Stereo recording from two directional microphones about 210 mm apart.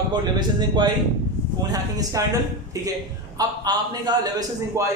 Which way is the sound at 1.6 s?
15° right (ahead or behind).